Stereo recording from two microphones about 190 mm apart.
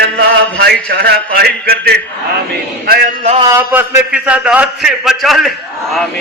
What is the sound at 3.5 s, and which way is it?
A man's voice, 10° right (ahead or behind).